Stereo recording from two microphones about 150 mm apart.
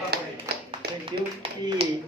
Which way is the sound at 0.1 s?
90° right.